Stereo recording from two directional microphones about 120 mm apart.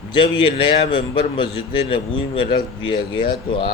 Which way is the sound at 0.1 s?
45° left (ahead or behind).